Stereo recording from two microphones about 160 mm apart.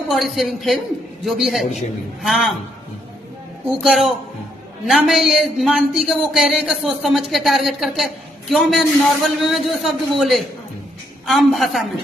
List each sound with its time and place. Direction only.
0.1 s speech: centre (ahead or behind)
3.8 s speech: 5° right (ahead or behind)